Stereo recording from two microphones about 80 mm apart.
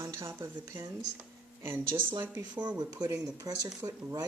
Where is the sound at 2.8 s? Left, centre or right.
Right.